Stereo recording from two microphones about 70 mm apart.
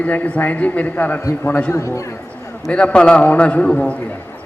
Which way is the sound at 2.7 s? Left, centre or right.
Centre.